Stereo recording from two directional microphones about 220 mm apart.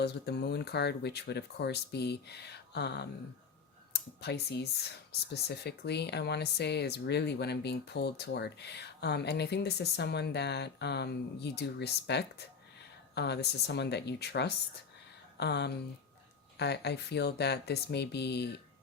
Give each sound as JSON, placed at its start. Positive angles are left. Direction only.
{"t": 0.0, "sound": "speech", "side_deg": 50}